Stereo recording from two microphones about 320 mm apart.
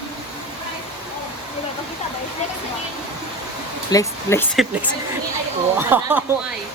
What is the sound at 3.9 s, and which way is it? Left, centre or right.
Speech, centre.